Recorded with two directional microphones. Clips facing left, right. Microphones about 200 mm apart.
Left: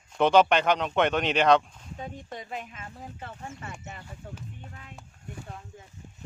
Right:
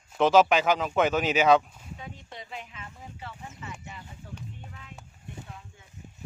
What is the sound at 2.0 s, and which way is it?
Speech, 45° left (ahead or behind).